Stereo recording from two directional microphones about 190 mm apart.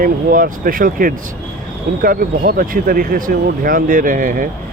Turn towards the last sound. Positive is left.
turn(degrees=-45)  # may be behind; listen again after turning